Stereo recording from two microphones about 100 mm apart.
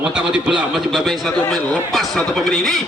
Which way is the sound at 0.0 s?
10° right (ahead or behind).